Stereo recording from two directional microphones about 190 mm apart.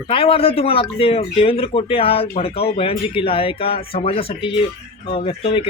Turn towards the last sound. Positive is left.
turn(degrees=30)  # may be behind; listen again after turning